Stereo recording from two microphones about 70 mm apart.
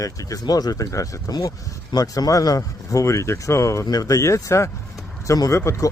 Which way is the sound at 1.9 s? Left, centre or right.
Left.